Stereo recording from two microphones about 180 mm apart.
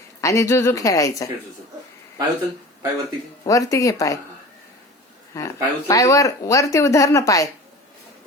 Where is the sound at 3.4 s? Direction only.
20° left (ahead or behind).